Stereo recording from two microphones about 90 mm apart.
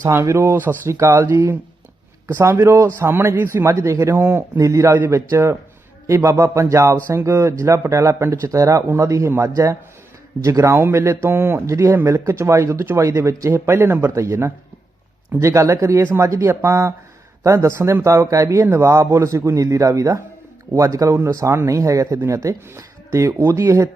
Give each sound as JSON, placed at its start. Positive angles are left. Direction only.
{"t": 0.0, "sound": "speech", "side_deg": -30}
{"t": 0.9, "sound": "speech", "side_deg": -30}
{"t": 4.5, "sound": "speech", "side_deg": -35}
{"t": 18.6, "sound": "speech", "side_deg": -25}
{"t": 18.9, "sound": "speech", "side_deg": -35}